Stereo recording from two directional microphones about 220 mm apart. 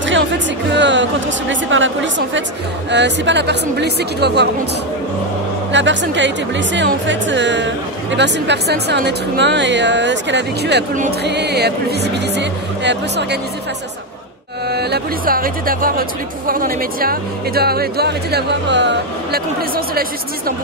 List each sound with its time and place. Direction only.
0.7 s a woman's voice: 55° right (ahead or behind)
5.7 s speech: 55° right (ahead or behind)
14.7 s speech: 45° right (ahead or behind)